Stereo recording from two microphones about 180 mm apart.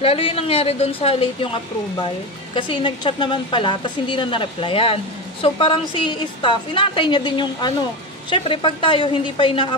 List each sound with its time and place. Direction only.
0.0 s a woman's voice: 30° left (ahead or behind)